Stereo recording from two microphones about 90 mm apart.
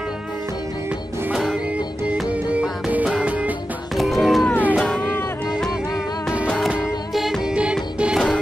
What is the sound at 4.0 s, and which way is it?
Music, centre (ahead or behind).